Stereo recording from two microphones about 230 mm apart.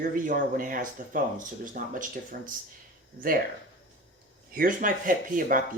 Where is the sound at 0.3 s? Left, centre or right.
Right.